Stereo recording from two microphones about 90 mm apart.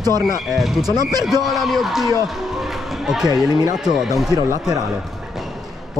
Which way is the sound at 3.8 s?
5° right (ahead or behind).